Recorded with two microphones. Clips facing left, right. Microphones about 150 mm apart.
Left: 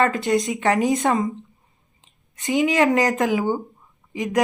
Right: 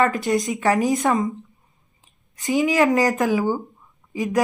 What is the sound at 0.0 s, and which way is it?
Speech, 20° left (ahead or behind).